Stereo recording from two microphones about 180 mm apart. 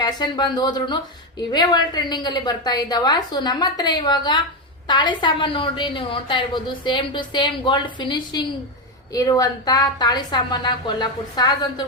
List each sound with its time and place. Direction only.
0.0 s a woman's voice: 25° left (ahead or behind)